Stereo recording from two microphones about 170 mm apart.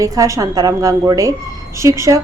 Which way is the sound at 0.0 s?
20° right (ahead or behind).